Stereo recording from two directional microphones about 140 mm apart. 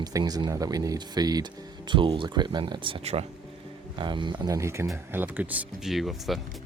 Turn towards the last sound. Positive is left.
turn(degrees=0)  # may be behind; listen again after turning